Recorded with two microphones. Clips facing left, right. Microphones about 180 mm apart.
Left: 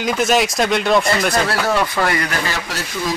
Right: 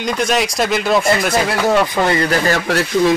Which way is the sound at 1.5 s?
25° right (ahead or behind).